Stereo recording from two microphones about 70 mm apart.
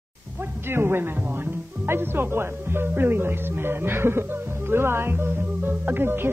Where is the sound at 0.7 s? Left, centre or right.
Right.